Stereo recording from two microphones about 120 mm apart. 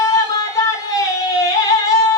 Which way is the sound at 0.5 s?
30° left (ahead or behind).